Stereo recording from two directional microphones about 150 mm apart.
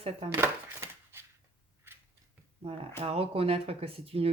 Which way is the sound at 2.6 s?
40° right (ahead or behind).